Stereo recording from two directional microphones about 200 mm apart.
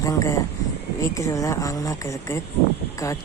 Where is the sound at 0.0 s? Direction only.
15° left (ahead or behind).